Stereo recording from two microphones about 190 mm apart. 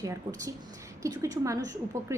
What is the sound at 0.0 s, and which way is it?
A woman's voice, 20° right (ahead or behind).